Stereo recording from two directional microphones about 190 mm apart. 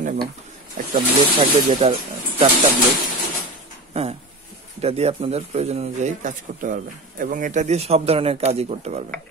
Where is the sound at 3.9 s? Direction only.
30° right (ahead or behind).